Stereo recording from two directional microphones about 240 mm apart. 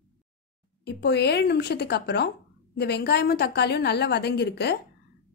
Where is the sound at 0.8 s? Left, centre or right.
Left.